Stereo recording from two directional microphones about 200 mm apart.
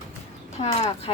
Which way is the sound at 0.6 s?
30° left (ahead or behind).